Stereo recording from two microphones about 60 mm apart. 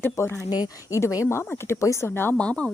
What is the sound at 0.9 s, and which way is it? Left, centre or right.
Speech, left.